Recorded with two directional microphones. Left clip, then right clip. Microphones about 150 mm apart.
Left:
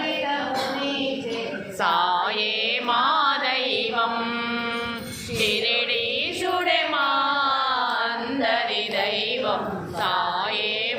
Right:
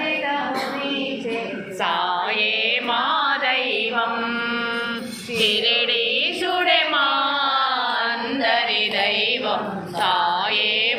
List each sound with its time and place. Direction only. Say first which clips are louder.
1.8 s music: left 1 dB; 20° left (ahead or behind)
5.4 s a sound: right 4 dB; centre (ahead or behind)
10.0 s music: right 4 dB; 5° left (ahead or behind)